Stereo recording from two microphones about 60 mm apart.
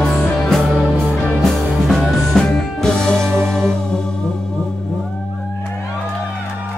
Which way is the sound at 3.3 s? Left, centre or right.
Right.